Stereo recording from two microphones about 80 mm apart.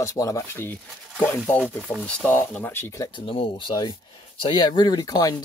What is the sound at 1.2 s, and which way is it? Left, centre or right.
Speech, centre.